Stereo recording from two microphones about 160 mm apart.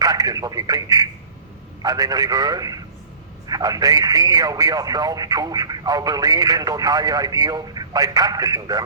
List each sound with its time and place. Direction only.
0.0 s speech: 20° right (ahead or behind)